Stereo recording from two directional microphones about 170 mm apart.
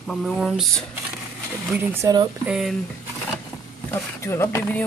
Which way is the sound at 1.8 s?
15° right (ahead or behind).